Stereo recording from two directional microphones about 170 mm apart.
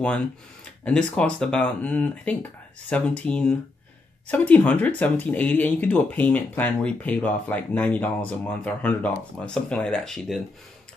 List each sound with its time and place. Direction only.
0.8 s speech: 5° left (ahead or behind)